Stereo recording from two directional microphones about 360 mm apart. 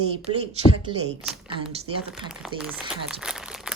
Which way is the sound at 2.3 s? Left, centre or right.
Centre.